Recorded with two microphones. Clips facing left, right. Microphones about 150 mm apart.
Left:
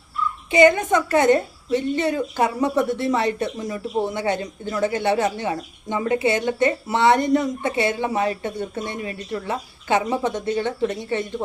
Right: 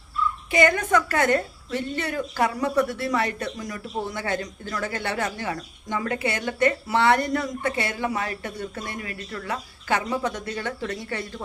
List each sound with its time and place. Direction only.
0.5 s a woman's voice: 20° left (ahead or behind)